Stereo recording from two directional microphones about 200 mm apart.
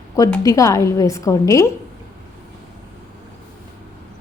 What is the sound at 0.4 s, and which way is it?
Speech, 15° left (ahead or behind).